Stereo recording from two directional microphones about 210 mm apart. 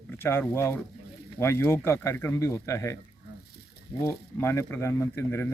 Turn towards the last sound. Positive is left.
turn(degrees=10)  # may be behind; listen again after turning